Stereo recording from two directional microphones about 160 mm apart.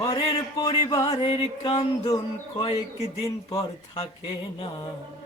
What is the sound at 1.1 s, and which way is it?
Music, 35° left (ahead or behind).